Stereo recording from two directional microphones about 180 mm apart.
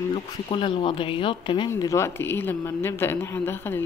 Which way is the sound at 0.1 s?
30° left (ahead or behind).